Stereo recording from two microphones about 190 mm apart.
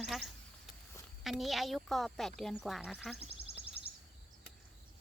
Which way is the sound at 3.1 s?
30° right (ahead or behind).